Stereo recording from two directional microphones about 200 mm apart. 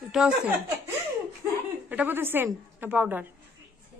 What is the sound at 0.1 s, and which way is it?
Speech, 5° right (ahead or behind).